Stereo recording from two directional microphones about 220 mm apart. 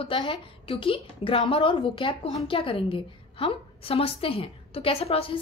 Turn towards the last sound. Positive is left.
turn(degrees=25)  # may be behind; listen again after turning